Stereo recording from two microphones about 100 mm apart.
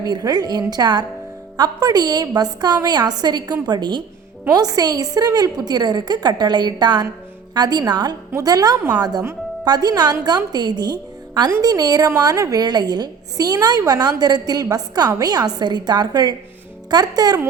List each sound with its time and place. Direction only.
0.0 s a woman's voice: 40° right (ahead or behind)